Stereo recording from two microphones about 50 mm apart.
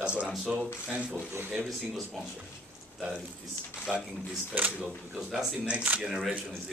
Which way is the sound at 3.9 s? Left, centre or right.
Centre.